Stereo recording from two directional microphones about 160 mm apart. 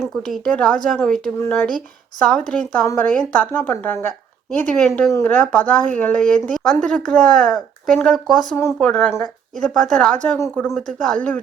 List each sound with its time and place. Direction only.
0.0 s a woman's voice: centre (ahead or behind)
8.5 s a woman's voice: 15° left (ahead or behind)
8.9 s speech: 5° left (ahead or behind)